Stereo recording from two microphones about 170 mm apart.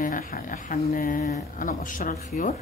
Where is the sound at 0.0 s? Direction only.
55° left (ahead or behind).